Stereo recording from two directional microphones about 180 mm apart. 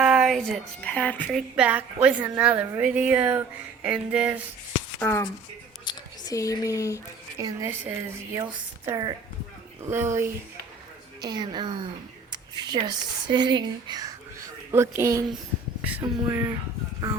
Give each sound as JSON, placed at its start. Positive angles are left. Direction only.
{"t": 0.0, "sound": "speech", "side_deg": -5}
{"t": 1.4, "sound": "a woman's voice", "side_deg": -5}
{"t": 4.9, "sound": "speech", "side_deg": 10}
{"t": 5.8, "sound": "whispering", "side_deg": 25}
{"t": 7.3, "sound": "a woman's voice", "side_deg": -15}